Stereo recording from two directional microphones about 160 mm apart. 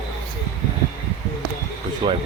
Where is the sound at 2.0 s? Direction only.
30° right (ahead or behind).